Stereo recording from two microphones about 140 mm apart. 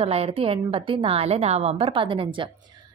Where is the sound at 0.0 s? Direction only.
45° right (ahead or behind).